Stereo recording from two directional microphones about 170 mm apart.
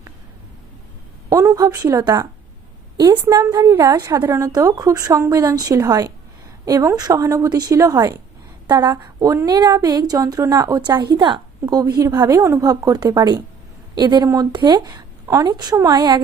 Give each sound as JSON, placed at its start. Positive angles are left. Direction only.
{"t": 1.3, "sound": "a woman's voice", "side_deg": -20}